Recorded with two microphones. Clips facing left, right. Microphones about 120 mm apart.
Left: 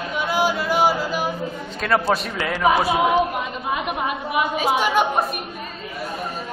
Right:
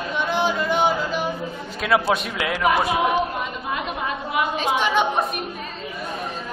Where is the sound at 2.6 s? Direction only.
20° left (ahead or behind).